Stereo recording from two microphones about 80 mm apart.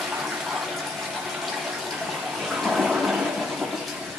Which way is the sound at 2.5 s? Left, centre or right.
Centre.